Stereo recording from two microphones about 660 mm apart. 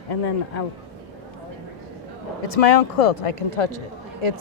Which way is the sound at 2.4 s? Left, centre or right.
Left.